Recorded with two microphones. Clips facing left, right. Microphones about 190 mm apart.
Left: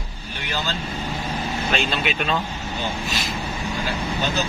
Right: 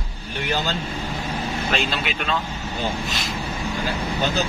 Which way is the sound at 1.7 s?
Centre (ahead or behind).